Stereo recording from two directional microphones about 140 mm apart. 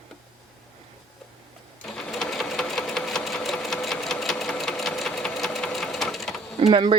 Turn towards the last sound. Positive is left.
turn(degrees=-40)  # may be behind; listen again after turning